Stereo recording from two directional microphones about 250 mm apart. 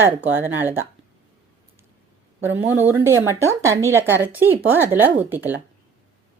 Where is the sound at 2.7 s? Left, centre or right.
Centre.